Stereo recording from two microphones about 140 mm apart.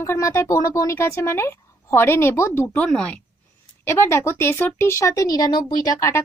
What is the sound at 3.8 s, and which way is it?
Speech, 15° left (ahead or behind).